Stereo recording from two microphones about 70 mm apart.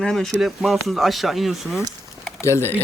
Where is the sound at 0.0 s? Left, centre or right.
Centre.